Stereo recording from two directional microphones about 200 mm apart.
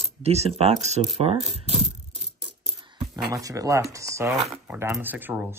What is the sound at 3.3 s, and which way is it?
Speech, 15° right (ahead or behind).